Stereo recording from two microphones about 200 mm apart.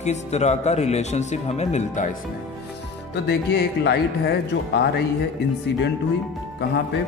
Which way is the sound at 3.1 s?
55° left (ahead or behind).